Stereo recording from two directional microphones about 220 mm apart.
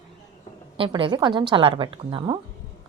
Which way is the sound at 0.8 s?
25° right (ahead or behind).